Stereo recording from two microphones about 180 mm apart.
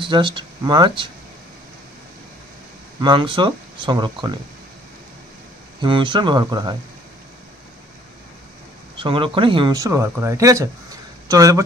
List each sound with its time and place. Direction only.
0.0 s speech: 25° right (ahead or behind)
3.0 s speech: 25° right (ahead or behind)
5.8 s speech: 25° right (ahead or behind)
8.9 s speech: 30° right (ahead or behind)